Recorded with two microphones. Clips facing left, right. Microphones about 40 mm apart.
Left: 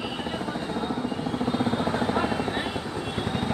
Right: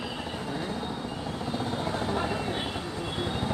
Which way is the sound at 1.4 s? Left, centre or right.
Left.